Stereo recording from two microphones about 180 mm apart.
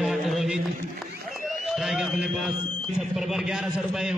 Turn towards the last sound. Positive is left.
turn(degrees=0)  # may be behind; listen again after turning